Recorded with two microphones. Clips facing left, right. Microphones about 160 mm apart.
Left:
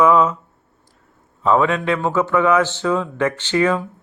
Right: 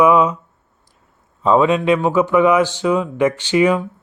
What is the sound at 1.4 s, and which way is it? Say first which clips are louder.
A man's voice: right 3 dB; 20° right (ahead or behind).